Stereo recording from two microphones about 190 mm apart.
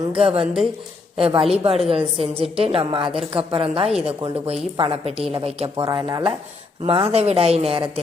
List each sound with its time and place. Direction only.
0.1 s a woman's voice: 30° right (ahead or behind)
5.7 s a woman's voice: 20° right (ahead or behind)